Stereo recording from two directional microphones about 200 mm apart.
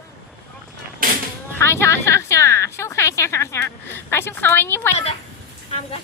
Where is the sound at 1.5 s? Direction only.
15° left (ahead or behind).